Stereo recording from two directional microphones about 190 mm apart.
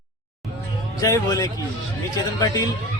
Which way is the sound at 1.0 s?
20° left (ahead or behind).